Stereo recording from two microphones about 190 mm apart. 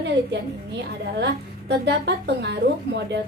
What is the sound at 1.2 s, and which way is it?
A woman's voice, 65° right (ahead or behind).